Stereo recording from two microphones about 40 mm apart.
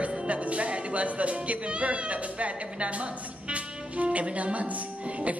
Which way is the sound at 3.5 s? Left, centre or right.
Right.